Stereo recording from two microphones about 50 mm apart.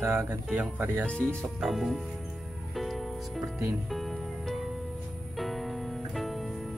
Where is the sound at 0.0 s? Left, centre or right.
Right.